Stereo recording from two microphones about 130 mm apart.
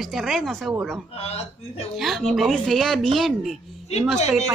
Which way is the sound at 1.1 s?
55° left (ahead or behind).